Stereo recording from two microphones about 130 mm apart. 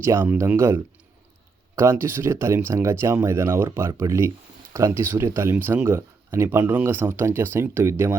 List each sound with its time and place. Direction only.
0.0 s speech: 20° right (ahead or behind)